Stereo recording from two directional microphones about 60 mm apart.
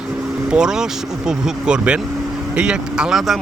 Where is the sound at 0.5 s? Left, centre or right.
Centre.